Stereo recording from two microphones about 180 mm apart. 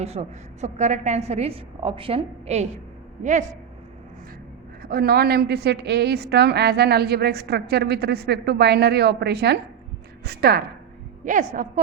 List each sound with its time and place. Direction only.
0.0 s a woman's voice: 35° right (ahead or behind)
4.8 s a woman's voice: 55° right (ahead or behind)
11.3 s a woman's voice: 45° right (ahead or behind)